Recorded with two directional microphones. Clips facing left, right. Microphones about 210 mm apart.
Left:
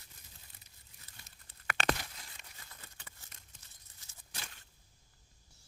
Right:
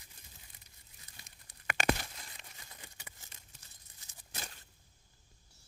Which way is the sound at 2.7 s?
15° right (ahead or behind).